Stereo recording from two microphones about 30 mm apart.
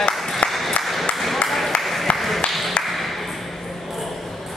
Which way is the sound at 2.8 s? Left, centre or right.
Centre.